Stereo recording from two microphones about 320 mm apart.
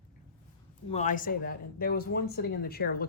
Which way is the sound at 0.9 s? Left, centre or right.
Left.